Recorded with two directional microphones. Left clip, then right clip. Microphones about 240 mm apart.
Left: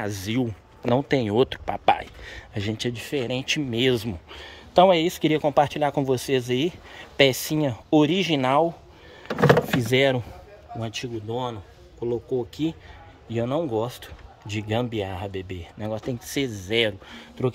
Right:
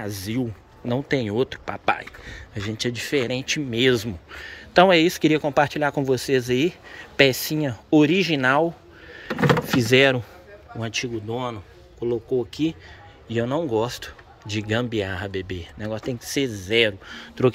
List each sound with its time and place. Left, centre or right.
0.0 s speech: centre
9.8 s speech: centre